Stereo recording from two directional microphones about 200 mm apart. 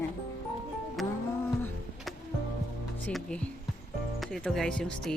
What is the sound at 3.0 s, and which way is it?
Speech, 5° left (ahead or behind).